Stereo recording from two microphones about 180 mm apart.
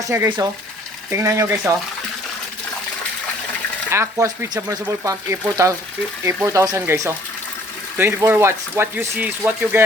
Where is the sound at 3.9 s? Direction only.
15° right (ahead or behind).